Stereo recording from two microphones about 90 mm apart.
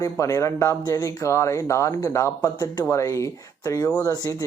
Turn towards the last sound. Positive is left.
turn(degrees=40)  # may be behind; listen again after turning